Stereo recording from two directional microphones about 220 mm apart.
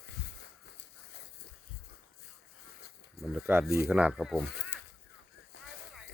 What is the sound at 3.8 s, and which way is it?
Speech, 5° right (ahead or behind).